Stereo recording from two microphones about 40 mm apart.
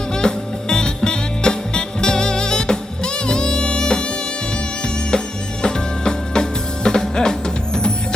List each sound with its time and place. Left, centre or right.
0.1 s music: centre
5.6 s music: centre